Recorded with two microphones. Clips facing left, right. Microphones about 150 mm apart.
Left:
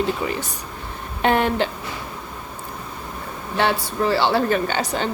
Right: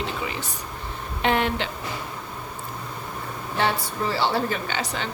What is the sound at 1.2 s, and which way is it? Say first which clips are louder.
Speech: left 4 dB; 45° left (ahead or behind).